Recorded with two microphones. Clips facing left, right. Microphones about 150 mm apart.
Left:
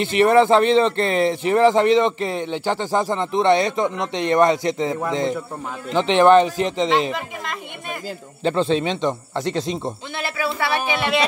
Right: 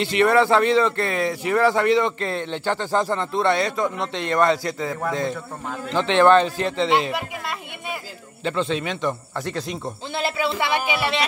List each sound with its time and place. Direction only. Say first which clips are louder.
0.0 s speech: left 3 dB; 20° left (ahead or behind)
8.5 s speech: left 5 dB; 30° left (ahead or behind)
10.1 s speech: right 4 dB; 25° right (ahead or behind)